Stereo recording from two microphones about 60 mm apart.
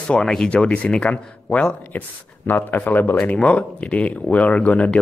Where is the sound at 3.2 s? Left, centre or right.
Left.